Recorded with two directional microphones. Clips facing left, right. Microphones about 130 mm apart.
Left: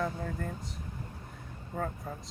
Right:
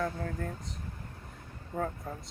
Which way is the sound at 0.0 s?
5° left (ahead or behind).